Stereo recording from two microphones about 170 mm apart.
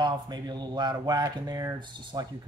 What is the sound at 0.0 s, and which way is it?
Speech, 25° right (ahead or behind).